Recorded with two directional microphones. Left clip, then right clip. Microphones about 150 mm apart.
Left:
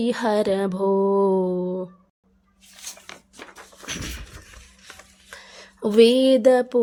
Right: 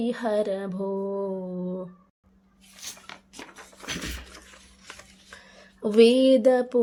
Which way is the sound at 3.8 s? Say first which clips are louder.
Left 1 dB; centre (ahead or behind).